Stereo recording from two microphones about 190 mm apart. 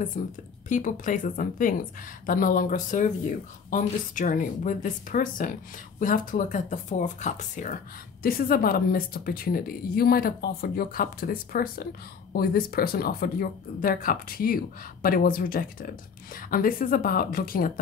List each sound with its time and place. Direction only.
0.2 s speech: 45° left (ahead or behind)